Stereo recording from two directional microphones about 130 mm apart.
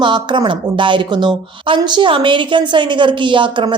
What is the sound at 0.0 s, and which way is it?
A woman's voice, 35° right (ahead or behind).